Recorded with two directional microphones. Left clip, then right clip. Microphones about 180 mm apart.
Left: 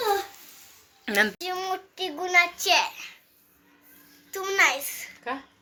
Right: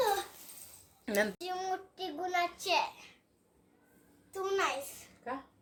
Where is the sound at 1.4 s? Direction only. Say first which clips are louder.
Left 7 dB; 20° left (ahead or behind).